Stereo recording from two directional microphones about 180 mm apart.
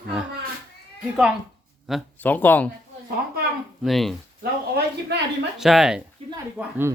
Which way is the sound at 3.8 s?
Centre (ahead or behind).